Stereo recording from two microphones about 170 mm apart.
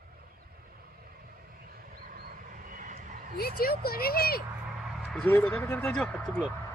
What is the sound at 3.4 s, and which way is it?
Speech, 65° left (ahead or behind).